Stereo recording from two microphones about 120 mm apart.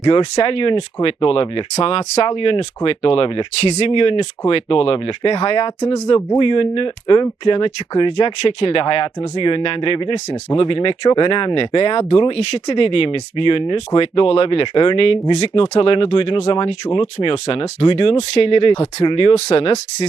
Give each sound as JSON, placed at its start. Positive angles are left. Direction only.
{"t": 0.0, "sound": "speech", "side_deg": 45}